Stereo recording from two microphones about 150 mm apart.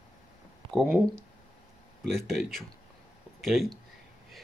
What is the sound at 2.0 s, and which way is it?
Speech, centre (ahead or behind).